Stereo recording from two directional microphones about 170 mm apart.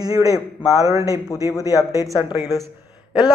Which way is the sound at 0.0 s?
20° right (ahead or behind).